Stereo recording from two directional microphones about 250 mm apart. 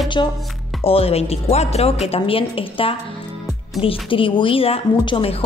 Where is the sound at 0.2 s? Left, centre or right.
Centre.